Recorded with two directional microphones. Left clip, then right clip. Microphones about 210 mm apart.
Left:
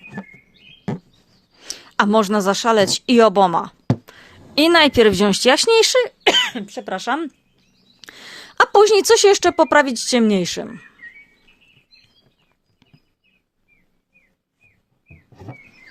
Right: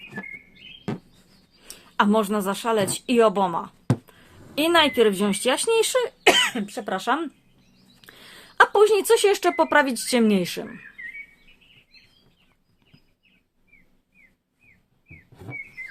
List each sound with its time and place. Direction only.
0.0 s music: 15° left (ahead or behind)
1.6 s a woman's voice: 50° left (ahead or behind)